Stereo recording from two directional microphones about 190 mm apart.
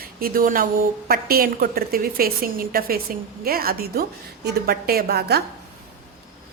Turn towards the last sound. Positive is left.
turn(degrees=-55)  # may be behind; listen again after turning